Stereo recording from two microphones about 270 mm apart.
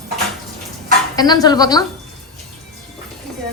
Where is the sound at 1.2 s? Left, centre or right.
Centre.